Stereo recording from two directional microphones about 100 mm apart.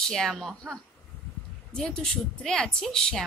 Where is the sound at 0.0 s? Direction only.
5° left (ahead or behind).